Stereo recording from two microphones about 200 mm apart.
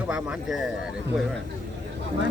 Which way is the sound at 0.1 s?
5° right (ahead or behind).